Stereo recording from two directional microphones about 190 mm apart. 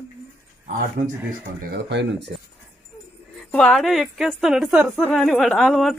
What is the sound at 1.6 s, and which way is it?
Speech, 60° right (ahead or behind).